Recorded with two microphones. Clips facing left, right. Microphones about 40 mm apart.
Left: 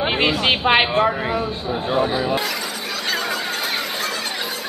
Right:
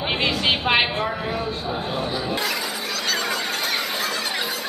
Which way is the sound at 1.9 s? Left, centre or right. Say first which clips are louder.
Left 10 dB; left.